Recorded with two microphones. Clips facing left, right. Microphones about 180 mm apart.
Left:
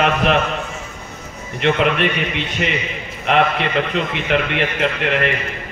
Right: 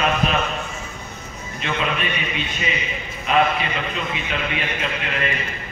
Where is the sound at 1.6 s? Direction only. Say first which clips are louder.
Left 8 dB; 70° left (ahead or behind).